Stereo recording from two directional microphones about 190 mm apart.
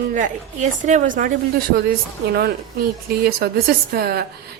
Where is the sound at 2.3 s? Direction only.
55° right (ahead or behind).